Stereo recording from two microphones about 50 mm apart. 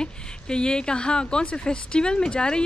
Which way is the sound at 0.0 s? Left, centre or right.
Centre.